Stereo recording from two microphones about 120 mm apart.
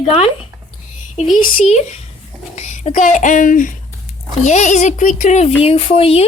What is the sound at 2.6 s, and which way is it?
Speech, 80° left.